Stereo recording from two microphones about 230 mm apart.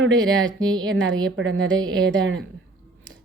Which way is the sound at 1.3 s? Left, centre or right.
Right.